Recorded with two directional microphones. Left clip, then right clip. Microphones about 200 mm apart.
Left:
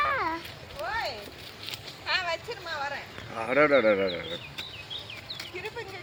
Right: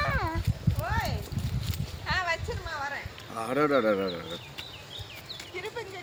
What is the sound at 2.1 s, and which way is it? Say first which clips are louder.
Vehicle: even; 30° left (ahead or behind).